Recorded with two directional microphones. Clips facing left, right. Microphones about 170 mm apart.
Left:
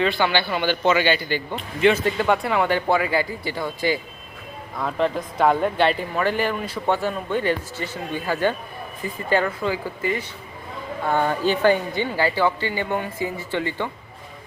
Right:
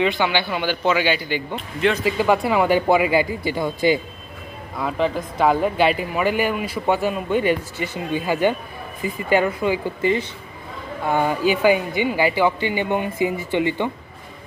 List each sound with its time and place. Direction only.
0.3 s speech: 10° right (ahead or behind)
1.5 s speech: centre (ahead or behind); by 4.0 s 20° right (ahead or behind)
4.8 s speech: 5° right (ahead or behind); by 10.2 s 25° right (ahead or behind)
11.0 s speech: 10° right (ahead or behind)